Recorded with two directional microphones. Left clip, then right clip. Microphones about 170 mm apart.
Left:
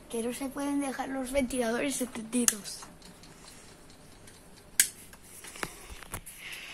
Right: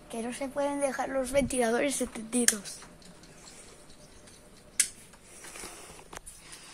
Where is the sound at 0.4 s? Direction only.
15° right (ahead or behind).